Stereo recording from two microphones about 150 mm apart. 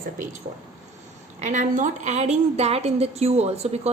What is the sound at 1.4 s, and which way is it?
A woman's voice, 55° right (ahead or behind).